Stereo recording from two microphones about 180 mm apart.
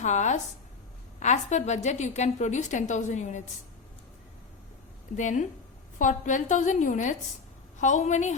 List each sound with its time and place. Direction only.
0.0 s a woman's voice: 40° left (ahead or behind)
5.1 s a woman's voice: 45° left (ahead or behind)